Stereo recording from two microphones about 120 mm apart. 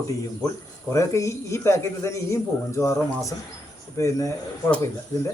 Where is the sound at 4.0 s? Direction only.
25° left (ahead or behind).